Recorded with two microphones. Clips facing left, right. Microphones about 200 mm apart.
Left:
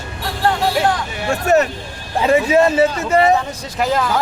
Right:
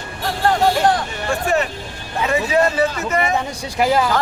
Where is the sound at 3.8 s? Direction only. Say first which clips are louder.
Right 2 dB; 10° right (ahead or behind).